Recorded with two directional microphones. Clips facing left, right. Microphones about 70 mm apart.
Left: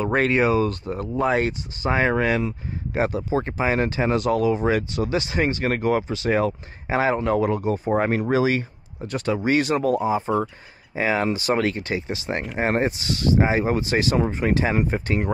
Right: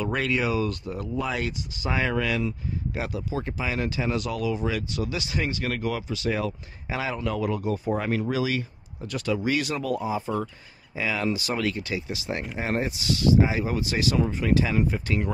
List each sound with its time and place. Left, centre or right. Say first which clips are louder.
0.0 s speech: left 6 dB; left